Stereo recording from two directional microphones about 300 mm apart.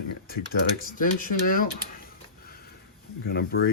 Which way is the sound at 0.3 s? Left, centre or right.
Left.